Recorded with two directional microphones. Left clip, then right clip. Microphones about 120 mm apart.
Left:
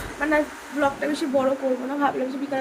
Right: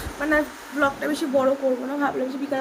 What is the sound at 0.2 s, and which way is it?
A woman's voice, 20° right (ahead or behind).